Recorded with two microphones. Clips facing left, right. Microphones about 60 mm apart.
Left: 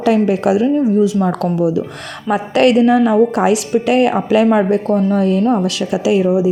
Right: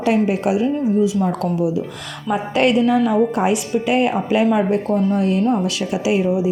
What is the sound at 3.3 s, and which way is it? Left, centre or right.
A woman's voice, left.